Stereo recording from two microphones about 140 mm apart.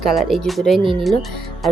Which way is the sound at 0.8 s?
40° right (ahead or behind).